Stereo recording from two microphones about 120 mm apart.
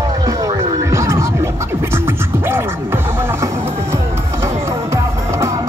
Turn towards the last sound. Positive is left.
turn(degrees=-25)  # may be behind; listen again after turning